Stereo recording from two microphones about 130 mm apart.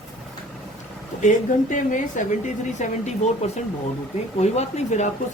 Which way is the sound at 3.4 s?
55° left (ahead or behind).